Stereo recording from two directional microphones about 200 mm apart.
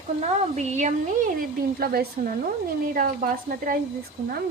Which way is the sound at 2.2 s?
40° right (ahead or behind).